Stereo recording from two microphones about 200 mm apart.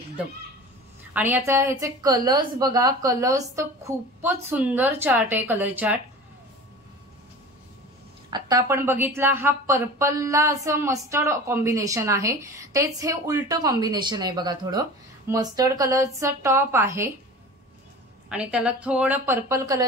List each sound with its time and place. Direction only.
1.1 s a woman's voice: 10° right (ahead or behind)
8.3 s a woman's voice: 15° right (ahead or behind)
18.3 s a woman's voice: 5° right (ahead or behind)